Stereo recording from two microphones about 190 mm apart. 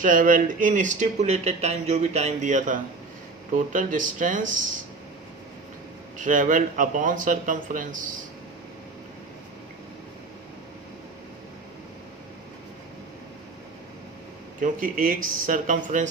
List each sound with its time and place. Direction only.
0.0 s speech: 45° right (ahead or behind)
6.1 s speech: 40° right (ahead or behind)
14.6 s speech: 45° right (ahead or behind)